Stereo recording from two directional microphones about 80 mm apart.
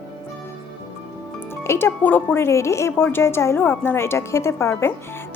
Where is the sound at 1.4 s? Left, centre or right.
Left.